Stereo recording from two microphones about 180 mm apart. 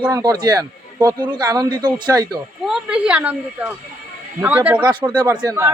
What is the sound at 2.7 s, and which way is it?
A woman's voice, 5° right (ahead or behind).